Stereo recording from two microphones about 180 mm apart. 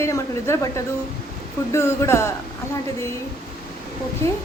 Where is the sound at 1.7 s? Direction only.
15° left (ahead or behind).